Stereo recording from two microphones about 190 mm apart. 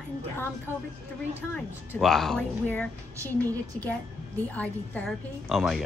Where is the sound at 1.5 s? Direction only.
Centre (ahead or behind).